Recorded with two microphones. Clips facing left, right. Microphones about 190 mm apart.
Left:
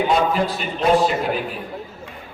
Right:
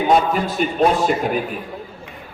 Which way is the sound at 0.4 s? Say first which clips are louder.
Right 3 dB; 45° right (ahead or behind).